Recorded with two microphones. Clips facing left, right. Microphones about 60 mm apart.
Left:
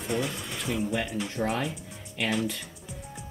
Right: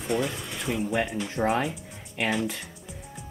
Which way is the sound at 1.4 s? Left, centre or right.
Right.